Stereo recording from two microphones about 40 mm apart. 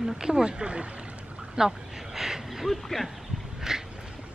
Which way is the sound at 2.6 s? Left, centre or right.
Centre.